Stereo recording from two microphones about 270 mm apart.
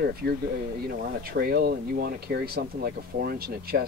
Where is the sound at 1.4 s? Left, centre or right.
Right.